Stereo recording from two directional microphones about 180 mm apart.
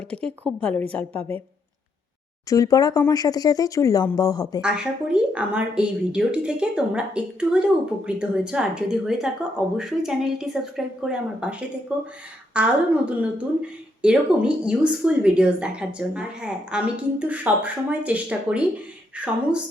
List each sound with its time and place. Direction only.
0.1 s a woman's voice: 5° left (ahead or behind)
2.5 s speech: 20° left (ahead or behind)
4.6 s a woman's voice: 5° right (ahead or behind)